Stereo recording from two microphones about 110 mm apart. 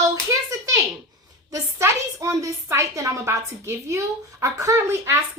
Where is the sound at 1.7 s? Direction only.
25° right (ahead or behind).